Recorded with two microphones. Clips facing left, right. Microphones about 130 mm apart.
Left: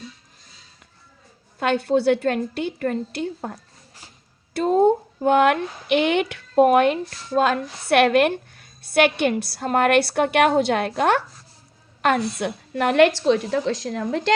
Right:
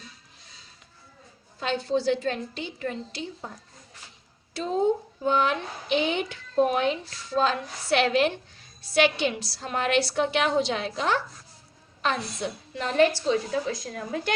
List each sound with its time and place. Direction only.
1.5 s a woman's voice: 60° left (ahead or behind); by 14.3 s 90° left